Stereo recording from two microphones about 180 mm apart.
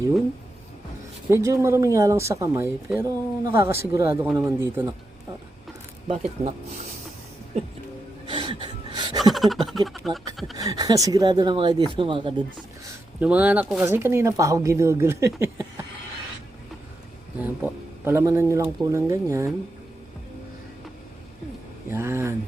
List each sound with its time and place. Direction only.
1.3 s speech: 15° right (ahead or behind)
8.3 s gasp: 25° right (ahead or behind)
9.3 s a sound: centre (ahead or behind)
9.8 s speech: centre (ahead or behind)
10.6 s speech: 20° right (ahead or behind)
13.1 s speech: 10° right (ahead or behind)
17.4 s speech: 10° right (ahead or behind)
21.8 s speech: 15° right (ahead or behind)